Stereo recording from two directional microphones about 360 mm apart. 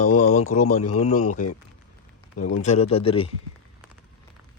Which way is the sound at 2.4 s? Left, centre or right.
Left.